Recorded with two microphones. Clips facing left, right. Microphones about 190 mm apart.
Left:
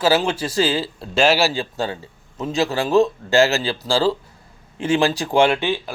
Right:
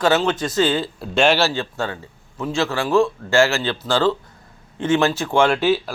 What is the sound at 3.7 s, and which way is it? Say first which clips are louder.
Speech: even; 35° left (ahead or behind).